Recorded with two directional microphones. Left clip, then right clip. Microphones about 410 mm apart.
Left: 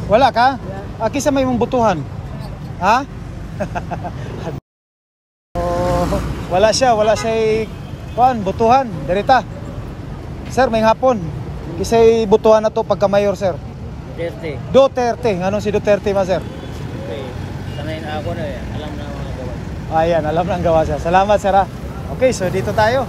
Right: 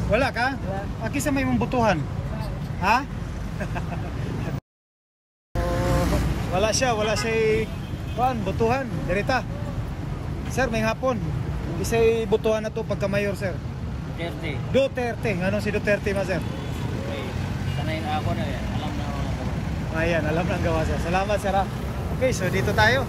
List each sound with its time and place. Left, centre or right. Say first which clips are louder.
0.1 s speech: left 11 dB; centre
5.6 s vehicle: left 8 dB; centre
6.5 s speech: left 10 dB; centre
10.8 s speech: left 11 dB; centre
12.3 s speech: left 12 dB; left
13.0 s speech: left 11 dB; centre
20.0 s speech: left 9 dB; centre